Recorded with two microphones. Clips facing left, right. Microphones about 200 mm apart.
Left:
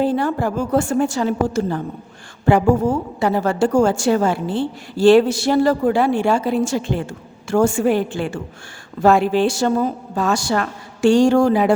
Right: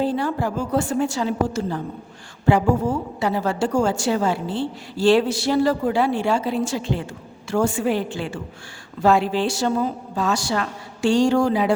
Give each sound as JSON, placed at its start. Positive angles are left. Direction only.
{"t": 0.0, "sound": "speech", "side_deg": 50}